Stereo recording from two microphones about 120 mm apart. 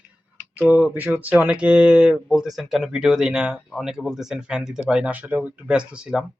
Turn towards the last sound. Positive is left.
turn(degrees=-5)  # may be behind; listen again after turning